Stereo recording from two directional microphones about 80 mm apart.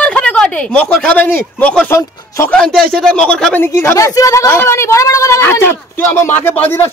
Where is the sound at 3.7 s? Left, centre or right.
Left.